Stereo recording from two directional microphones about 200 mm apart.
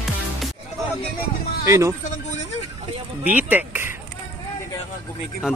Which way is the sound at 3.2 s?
10° right (ahead or behind).